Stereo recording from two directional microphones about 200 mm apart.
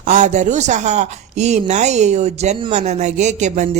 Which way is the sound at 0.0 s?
40° right (ahead or behind).